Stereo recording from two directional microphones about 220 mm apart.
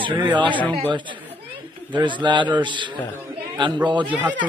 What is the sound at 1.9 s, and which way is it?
A man's voice, 20° right (ahead or behind).